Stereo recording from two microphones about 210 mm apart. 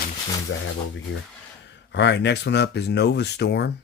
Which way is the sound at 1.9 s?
55° left (ahead or behind).